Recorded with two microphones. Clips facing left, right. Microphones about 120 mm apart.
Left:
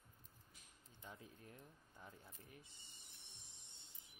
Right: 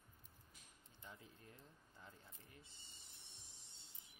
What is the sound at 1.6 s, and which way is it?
Speech, 15° left (ahead or behind).